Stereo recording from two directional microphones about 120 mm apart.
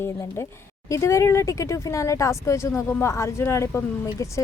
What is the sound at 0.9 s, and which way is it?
A woman's voice, 25° left (ahead or behind).